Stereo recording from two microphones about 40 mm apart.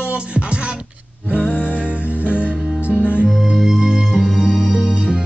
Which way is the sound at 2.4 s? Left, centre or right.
Right.